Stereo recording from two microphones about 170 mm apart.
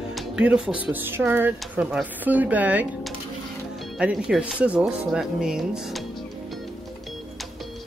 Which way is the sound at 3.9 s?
5° right (ahead or behind).